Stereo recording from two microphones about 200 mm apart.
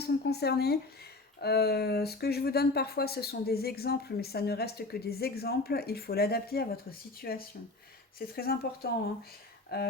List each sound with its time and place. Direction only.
0.0 s speech: 55° left (ahead or behind)